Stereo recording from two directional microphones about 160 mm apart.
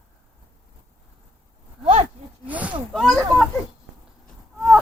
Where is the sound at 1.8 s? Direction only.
45° right (ahead or behind).